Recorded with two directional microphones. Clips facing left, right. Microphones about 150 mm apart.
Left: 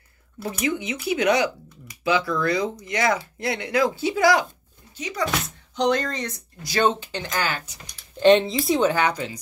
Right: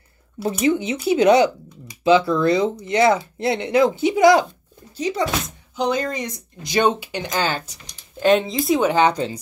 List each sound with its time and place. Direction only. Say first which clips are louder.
0.4 s speech: right 7 dB; 30° right (ahead or behind)
4.9 s speech: right 8 dB; 30° right (ahead or behind)
5.8 s speech: even; 5° right (ahead or behind); by 7.7 s 30° right (ahead or behind)
8.2 s speech: left 1 dB; centre (ahead or behind)
8.8 s speech: right 4 dB; 20° right (ahead or behind)